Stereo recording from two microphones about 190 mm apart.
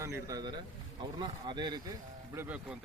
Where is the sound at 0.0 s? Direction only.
15° right (ahead or behind).